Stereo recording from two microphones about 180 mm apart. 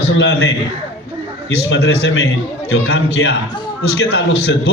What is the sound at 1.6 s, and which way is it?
A man's voice, 85° left.